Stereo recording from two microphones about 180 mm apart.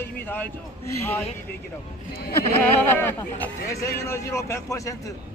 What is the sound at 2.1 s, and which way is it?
Speech, 60° left (ahead or behind).